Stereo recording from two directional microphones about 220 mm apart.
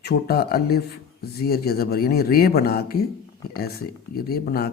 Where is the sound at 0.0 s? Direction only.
45° left (ahead or behind).